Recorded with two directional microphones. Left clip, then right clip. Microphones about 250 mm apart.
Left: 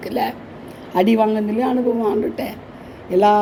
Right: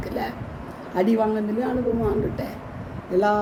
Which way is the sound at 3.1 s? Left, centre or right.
Left.